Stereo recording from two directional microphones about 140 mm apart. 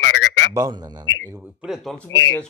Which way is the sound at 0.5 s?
25° right (ahead or behind).